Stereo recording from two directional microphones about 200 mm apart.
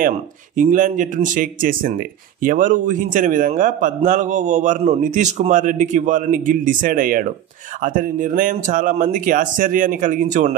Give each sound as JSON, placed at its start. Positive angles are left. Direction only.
{"t": 0.6, "sound": "speech", "side_deg": -40}